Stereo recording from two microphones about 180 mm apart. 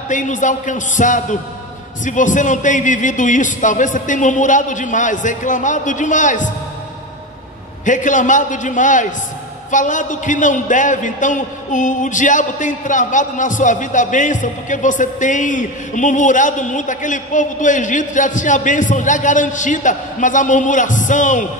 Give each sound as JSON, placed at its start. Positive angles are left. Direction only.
{"t": 0.1, "sound": "a man's voice", "side_deg": 45}
{"t": 7.8, "sound": "a man's voice", "side_deg": 45}